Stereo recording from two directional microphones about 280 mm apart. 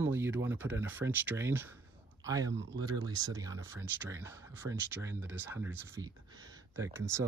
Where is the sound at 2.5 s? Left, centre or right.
Right.